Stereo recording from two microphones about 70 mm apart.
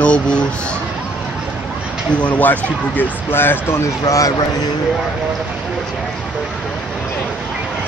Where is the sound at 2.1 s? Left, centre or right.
Centre; by 3.9 s left.